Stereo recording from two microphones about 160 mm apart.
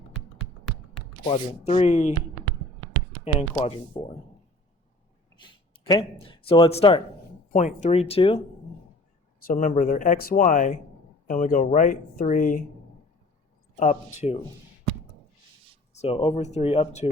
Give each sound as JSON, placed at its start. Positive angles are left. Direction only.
{"t": 1.3, "sound": "speech", "side_deg": 40}
{"t": 3.2, "sound": "speech", "side_deg": 30}
{"t": 5.4, "sound": "a sound", "side_deg": 25}
{"t": 7.5, "sound": "speech", "side_deg": 50}
{"t": 9.5, "sound": "speech", "side_deg": 55}
{"t": 13.7, "sound": "speech", "side_deg": 45}
{"t": 15.9, "sound": "speech", "side_deg": 40}